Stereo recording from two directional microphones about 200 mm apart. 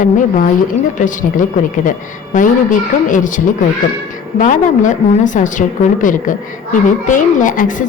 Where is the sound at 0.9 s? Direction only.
40° left (ahead or behind).